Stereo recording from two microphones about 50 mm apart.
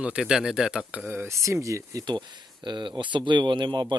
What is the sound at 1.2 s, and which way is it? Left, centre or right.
Speech, right.